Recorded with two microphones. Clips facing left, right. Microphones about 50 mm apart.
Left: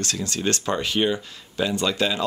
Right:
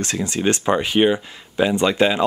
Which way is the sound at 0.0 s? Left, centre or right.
Right.